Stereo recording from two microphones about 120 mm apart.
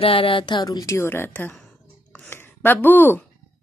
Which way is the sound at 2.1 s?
15° left (ahead or behind).